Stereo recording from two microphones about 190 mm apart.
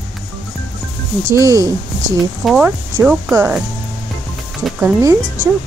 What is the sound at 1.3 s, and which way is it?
Speech, 15° right (ahead or behind).